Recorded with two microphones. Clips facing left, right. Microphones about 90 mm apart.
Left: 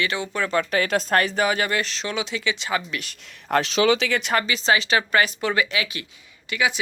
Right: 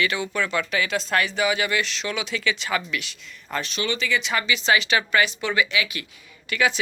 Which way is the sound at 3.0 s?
55° left (ahead or behind).